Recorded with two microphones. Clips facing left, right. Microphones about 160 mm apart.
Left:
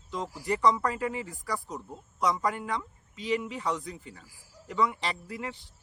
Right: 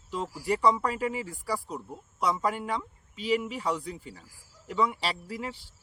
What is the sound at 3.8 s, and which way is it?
Speech, 30° right (ahead or behind).